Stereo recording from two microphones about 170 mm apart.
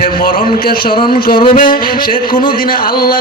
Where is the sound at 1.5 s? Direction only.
55° left (ahead or behind).